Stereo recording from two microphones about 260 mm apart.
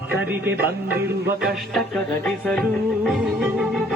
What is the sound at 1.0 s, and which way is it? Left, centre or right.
Music, right.